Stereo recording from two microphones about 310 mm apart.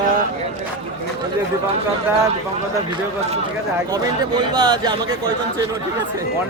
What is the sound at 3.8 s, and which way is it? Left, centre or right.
Speech, centre.